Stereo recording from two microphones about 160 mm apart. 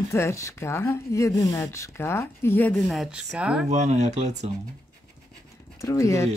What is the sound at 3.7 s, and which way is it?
Speech, 45° right (ahead or behind).